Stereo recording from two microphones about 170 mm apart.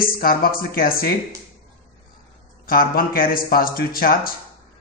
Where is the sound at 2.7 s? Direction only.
60° left (ahead or behind).